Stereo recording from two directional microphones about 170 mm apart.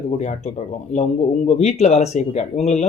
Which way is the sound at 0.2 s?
45° left (ahead or behind).